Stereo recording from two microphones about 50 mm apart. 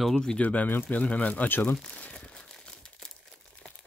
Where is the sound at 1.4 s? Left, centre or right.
Left.